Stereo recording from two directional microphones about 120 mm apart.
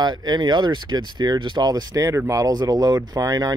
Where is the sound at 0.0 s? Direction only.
35° right (ahead or behind).